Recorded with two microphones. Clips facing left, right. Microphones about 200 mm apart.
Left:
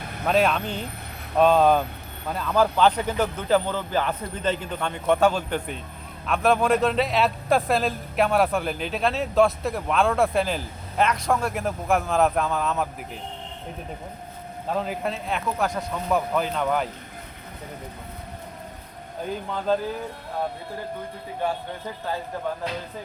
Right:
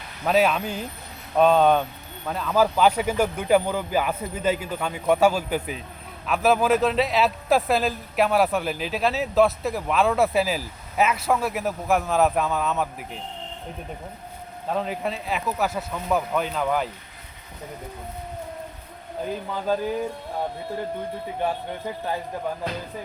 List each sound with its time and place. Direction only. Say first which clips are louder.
0.3 s a man's voice: right 1 dB; 5° right (ahead or behind)
14.7 s a man's voice: even; centre (ahead or behind)